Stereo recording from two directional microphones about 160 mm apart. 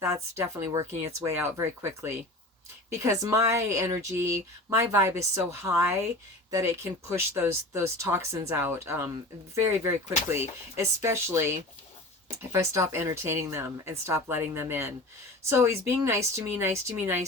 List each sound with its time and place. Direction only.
0.0 s speech: 20° right (ahead or behind)